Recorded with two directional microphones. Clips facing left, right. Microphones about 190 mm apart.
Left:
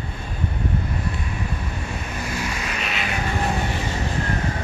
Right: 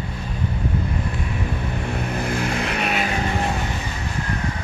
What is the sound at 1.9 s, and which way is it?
Vehicle, 60° right (ahead or behind).